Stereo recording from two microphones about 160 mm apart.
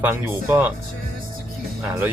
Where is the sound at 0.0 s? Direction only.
10° right (ahead or behind).